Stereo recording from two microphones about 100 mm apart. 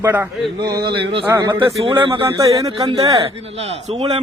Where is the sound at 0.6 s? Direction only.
45° right (ahead or behind).